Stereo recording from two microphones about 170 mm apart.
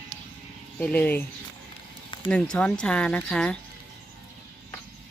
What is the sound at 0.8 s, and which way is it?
Speech, 10° left (ahead or behind).